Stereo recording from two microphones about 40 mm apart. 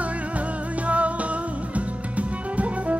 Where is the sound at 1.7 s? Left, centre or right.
Right.